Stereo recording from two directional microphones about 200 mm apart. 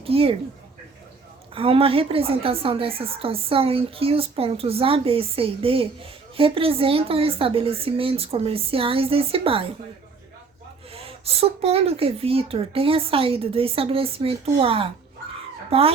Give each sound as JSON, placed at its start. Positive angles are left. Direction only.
{"t": 0.0, "sound": "a woman's voice", "side_deg": -30}
{"t": 1.5, "sound": "a woman's voice", "side_deg": -30}
{"t": 10.9, "sound": "a woman's voice", "side_deg": -30}